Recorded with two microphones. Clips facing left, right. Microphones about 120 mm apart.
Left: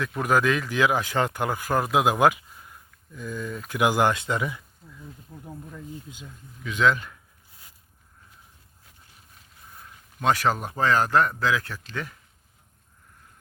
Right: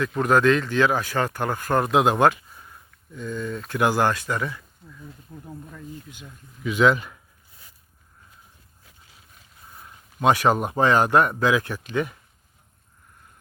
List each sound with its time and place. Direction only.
0.0 s speech: 5° left (ahead or behind)
6.7 s speech: 10° right (ahead or behind)
10.2 s speech: 15° right (ahead or behind)